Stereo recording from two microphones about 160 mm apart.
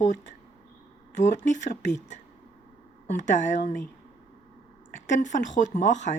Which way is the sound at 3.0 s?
50° left (ahead or behind).